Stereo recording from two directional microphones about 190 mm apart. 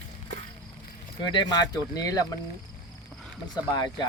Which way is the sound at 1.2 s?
25° left (ahead or behind).